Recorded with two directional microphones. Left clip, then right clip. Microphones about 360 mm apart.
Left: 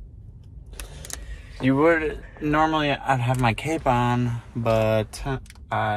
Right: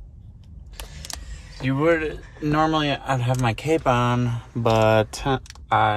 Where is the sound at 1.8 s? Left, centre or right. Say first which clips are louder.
Even; centre.